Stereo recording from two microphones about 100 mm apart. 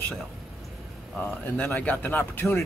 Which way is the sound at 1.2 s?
20° left (ahead or behind).